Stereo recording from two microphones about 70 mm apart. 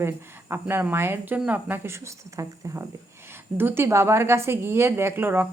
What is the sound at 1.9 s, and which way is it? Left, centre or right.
Speech, right.